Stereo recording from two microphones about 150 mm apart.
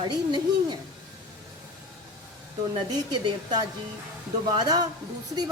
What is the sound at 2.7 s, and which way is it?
A woman's voice, 25° right (ahead or behind).